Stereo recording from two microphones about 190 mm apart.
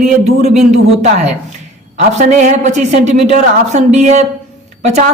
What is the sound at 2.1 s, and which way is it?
A woman's voice, 40° right (ahead or behind).